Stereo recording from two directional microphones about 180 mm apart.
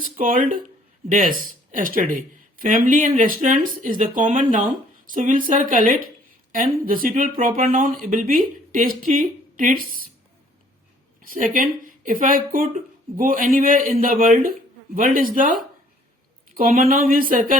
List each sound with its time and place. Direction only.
0.0 s speech: 50° right (ahead or behind)
11.2 s speech: 50° right (ahead or behind)